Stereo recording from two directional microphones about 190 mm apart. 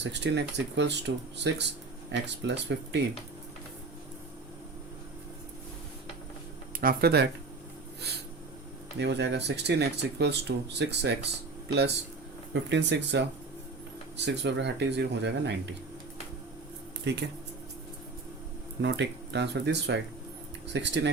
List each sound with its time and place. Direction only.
0.0 s speech: 65° right (ahead or behind)
6.7 s speech: 50° right (ahead or behind)
9.0 s speech: 65° right (ahead or behind)
12.5 s speech: 70° right (ahead or behind)
17.1 s speech: 65° right (ahead or behind)
18.8 s speech: 65° right (ahead or behind)